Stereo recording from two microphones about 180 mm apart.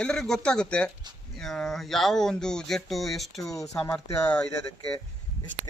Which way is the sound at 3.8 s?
5° left (ahead or behind).